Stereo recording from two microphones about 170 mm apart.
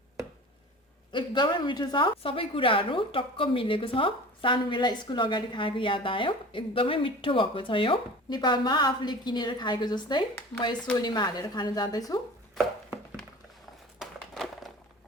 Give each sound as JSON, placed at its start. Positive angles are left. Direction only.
{"t": 1.1, "sound": "a woman's voice", "side_deg": 30}
{"t": 14.0, "sound": "crumpling", "side_deg": 0}